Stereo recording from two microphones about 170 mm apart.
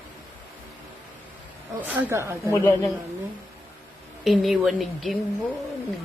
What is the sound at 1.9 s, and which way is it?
Speech, 15° right (ahead or behind).